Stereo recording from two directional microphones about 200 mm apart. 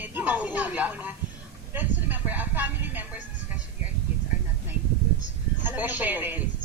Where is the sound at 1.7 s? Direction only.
10° right (ahead or behind).